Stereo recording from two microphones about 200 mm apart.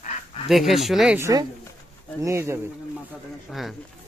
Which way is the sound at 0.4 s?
Centre (ahead or behind).